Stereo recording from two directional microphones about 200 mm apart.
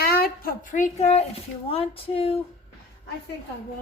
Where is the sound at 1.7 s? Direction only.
30° left (ahead or behind).